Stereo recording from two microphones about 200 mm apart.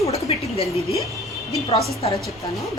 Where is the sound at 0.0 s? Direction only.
30° left (ahead or behind).